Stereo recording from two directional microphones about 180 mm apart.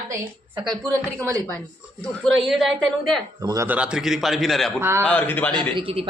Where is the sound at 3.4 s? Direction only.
20° right (ahead or behind); by 4.7 s centre (ahead or behind).